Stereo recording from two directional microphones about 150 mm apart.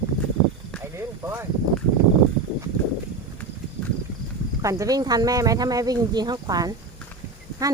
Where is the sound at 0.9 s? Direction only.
15° right (ahead or behind).